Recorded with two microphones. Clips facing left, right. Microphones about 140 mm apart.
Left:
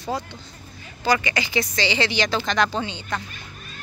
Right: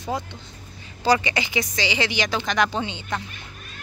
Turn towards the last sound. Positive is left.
turn(degrees=-20)  # may be behind; listen again after turning